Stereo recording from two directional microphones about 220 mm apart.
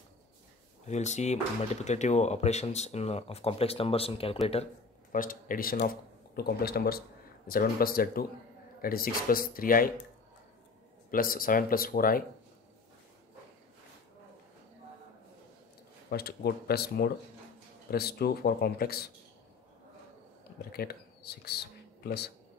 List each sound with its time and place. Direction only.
0.8 s speech: 30° left (ahead or behind)
5.1 s speech: 40° left (ahead or behind)
11.1 s speech: 40° left (ahead or behind)
16.1 s a man's voice: 45° left (ahead or behind)
20.7 s speech: 45° left (ahead or behind)